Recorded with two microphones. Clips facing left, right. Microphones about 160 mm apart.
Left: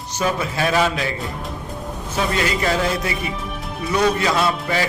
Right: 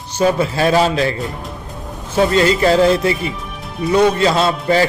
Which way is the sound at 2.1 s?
30° right (ahead or behind).